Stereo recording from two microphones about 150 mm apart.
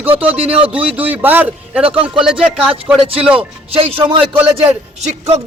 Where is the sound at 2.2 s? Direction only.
5° right (ahead or behind).